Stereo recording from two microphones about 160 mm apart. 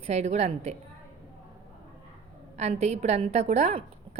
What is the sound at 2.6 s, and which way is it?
A woman's voice, 45° right (ahead or behind).